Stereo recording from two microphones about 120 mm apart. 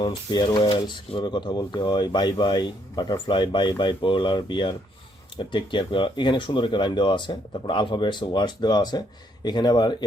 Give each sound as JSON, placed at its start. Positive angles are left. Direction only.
{"t": 0.0, "sound": "speech", "side_deg": 40}